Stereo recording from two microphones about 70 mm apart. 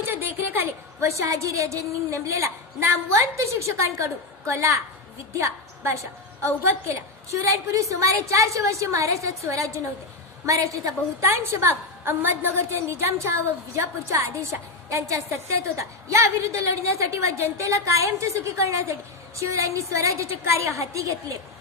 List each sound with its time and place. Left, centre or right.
0.0 s a woman's voice: right
11.2 s a woman's voice: right